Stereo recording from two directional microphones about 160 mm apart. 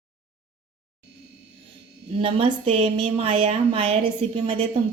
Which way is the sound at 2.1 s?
35° right (ahead or behind).